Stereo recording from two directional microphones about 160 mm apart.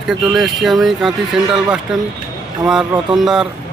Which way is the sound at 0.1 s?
Centre (ahead or behind).